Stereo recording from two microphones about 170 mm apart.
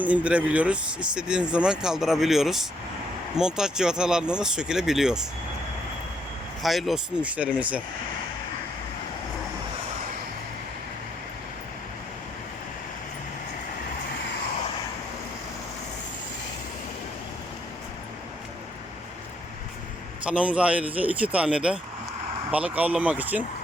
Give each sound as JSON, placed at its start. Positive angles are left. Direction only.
{"t": 0.0, "sound": "speech", "side_deg": -10}
{"t": 6.6, "sound": "speech", "side_deg": 0}
{"t": 20.2, "sound": "speech", "side_deg": -5}